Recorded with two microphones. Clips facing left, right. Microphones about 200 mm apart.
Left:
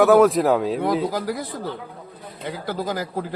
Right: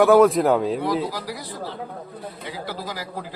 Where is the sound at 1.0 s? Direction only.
50° left (ahead or behind).